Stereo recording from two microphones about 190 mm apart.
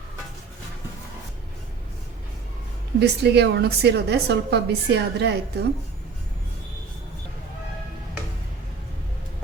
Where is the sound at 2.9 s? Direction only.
60° right (ahead or behind).